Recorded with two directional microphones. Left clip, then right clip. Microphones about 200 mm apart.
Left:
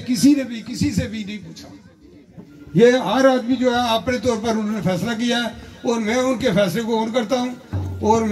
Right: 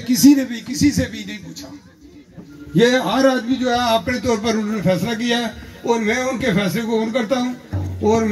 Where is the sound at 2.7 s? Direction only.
Centre (ahead or behind).